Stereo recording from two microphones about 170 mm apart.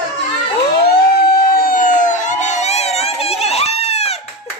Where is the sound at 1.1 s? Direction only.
60° left (ahead or behind); by 4.2 s 40° left (ahead or behind).